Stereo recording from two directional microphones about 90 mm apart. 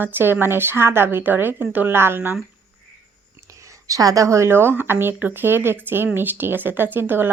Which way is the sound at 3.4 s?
35° right (ahead or behind).